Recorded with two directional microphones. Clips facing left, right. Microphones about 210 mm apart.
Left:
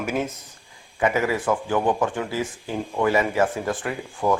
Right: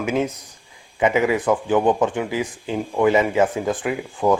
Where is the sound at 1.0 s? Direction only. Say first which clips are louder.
Right 4 dB; 15° right (ahead or behind).